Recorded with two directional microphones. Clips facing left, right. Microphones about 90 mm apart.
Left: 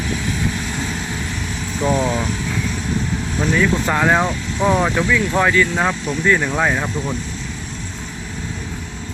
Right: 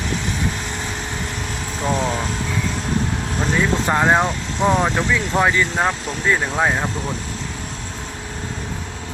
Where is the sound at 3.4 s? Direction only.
30° right (ahead or behind).